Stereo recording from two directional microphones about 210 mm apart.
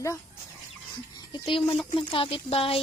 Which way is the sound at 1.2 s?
25° left (ahead or behind).